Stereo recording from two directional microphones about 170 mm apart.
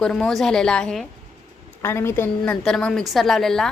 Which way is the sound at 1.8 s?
15° left (ahead or behind).